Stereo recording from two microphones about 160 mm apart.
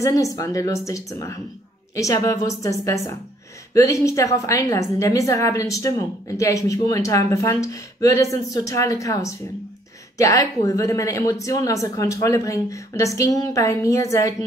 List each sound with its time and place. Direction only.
0.0 s speech: 20° left (ahead or behind)